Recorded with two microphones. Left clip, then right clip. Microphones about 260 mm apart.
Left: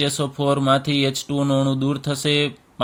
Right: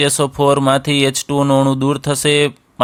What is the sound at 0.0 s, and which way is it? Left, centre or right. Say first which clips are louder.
Speech: right 8 dB; right.